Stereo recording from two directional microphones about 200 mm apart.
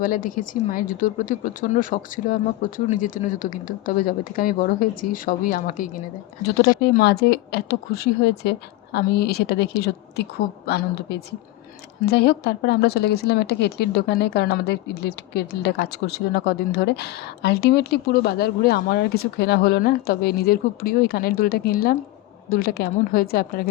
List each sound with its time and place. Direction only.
0.0 s a woman's voice: 40° left (ahead or behind)